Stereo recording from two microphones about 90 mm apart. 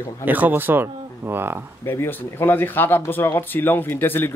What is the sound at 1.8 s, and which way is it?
Speech, 25° left (ahead or behind).